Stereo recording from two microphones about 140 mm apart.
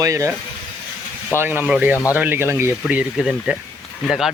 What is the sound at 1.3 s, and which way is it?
Speech, 15° right (ahead or behind).